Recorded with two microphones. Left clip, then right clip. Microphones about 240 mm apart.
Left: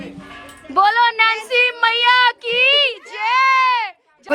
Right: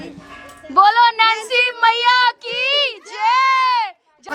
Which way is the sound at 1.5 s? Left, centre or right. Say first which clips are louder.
Right 1 dB; centre.